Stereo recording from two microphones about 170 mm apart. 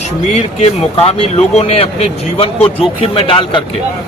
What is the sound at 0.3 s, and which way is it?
Speech, 35° left (ahead or behind).